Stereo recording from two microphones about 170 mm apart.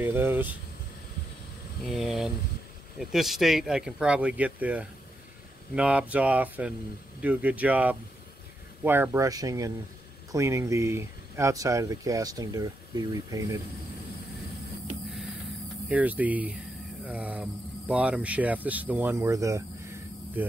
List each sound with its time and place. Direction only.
0.0 s speech: 10° right (ahead or behind)
1.9 s speech: centre (ahead or behind); by 13.6 s 20° right (ahead or behind)
15.9 s speech: 10° right (ahead or behind)